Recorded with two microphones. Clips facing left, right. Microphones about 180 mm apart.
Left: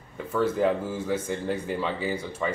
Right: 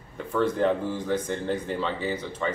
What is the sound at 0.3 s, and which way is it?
Speech, 5° left (ahead or behind).